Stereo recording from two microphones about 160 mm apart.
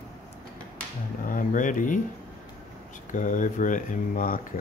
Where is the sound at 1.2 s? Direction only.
55° left (ahead or behind).